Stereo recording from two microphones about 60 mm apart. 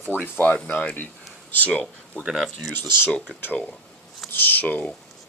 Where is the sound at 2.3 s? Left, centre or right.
Centre.